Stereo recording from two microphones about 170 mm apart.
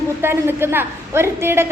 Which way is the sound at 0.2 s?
15° right (ahead or behind).